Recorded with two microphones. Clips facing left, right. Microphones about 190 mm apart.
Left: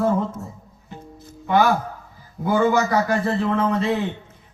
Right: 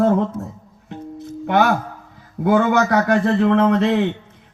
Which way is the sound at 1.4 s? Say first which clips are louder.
Right 1 dB; 70° right (ahead or behind).